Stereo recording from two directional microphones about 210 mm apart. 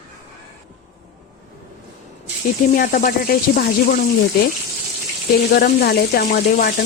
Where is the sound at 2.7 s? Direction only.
40° left (ahead or behind).